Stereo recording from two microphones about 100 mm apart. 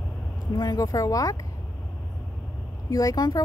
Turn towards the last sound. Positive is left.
turn(degrees=40)  # may be behind; listen again after turning